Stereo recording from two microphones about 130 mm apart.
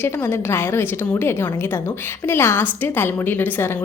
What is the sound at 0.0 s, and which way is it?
A woman's voice, 20° left (ahead or behind).